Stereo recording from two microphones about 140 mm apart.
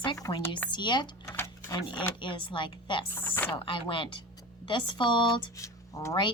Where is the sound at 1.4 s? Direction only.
20° left (ahead or behind).